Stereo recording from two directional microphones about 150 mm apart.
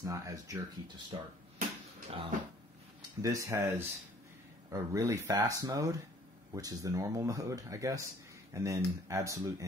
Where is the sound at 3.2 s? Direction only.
20° right (ahead or behind).